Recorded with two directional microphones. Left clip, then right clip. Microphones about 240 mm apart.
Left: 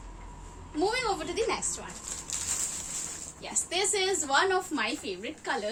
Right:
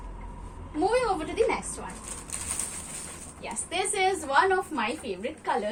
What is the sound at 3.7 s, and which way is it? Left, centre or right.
A woman's voice, left.